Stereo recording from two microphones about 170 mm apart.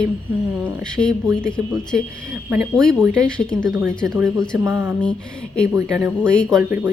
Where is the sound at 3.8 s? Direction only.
15° right (ahead or behind).